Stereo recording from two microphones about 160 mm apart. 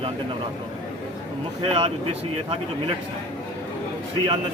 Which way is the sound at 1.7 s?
35° right (ahead or behind).